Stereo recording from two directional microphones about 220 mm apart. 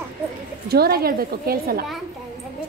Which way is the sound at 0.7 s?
45° right (ahead or behind).